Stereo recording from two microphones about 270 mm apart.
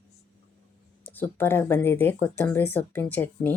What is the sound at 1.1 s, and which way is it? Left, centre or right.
Speech, centre.